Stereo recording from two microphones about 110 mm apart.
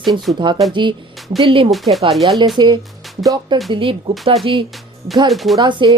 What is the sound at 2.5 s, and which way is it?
Speech, 40° right (ahead or behind).